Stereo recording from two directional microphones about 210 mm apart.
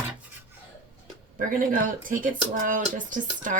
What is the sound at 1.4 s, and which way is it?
Speech, 40° right (ahead or behind).